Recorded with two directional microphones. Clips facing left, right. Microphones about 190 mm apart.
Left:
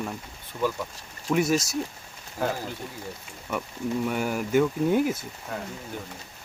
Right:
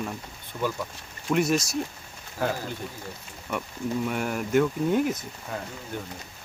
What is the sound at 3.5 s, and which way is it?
Speech, centre (ahead or behind).